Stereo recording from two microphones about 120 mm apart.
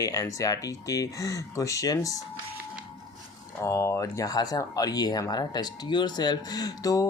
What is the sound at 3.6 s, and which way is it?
Speech, 20° left (ahead or behind).